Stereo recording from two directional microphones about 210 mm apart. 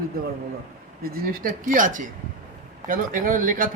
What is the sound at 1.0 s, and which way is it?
Speech, 45° right (ahead or behind).